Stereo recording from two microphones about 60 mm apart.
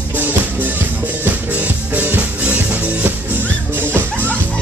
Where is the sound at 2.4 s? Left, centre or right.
Right.